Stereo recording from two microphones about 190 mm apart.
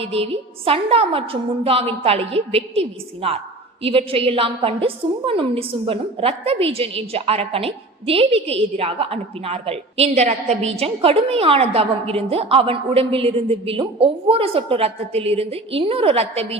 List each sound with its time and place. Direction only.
0.0 s a woman's voice: 30° right (ahead or behind)